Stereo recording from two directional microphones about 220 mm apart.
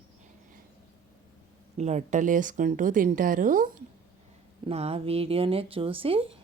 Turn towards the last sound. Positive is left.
turn(degrees=-25)  # may be behind; listen again after turning